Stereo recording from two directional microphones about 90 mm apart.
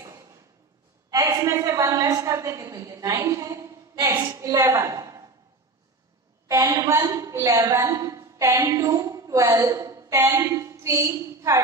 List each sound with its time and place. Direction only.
1.1 s a woman's voice: 40° right (ahead or behind)
6.4 s a woman's voice: 40° right (ahead or behind)